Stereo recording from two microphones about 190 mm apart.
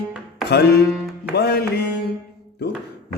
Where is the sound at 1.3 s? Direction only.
55° left (ahead or behind).